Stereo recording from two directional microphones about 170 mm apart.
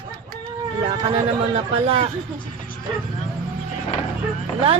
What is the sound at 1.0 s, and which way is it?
Speech, 35° right (ahead or behind).